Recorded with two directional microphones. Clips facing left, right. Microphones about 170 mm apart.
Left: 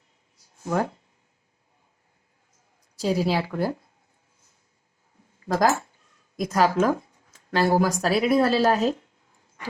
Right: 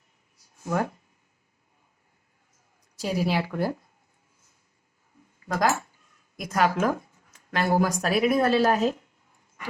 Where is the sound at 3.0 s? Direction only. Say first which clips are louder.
Left 3 dB; 30° left (ahead or behind).